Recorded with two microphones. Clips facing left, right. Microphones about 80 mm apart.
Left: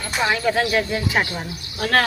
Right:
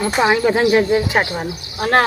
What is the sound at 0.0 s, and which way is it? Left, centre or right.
Speech, right.